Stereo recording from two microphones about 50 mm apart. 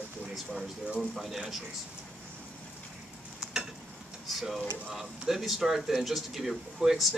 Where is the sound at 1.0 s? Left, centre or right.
Centre.